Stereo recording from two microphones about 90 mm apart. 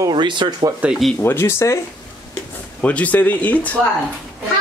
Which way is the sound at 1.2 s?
25° left (ahead or behind).